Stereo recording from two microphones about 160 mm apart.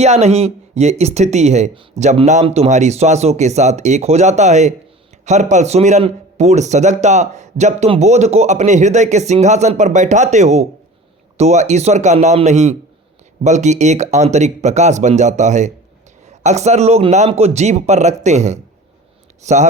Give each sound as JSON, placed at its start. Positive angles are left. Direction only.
{"t": 0.0, "sound": "a man's voice", "side_deg": -40}